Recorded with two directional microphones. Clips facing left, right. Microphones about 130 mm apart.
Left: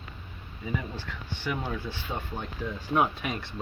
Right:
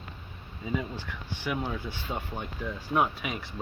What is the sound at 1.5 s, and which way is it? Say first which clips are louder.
Speech: even; 15° right (ahead or behind).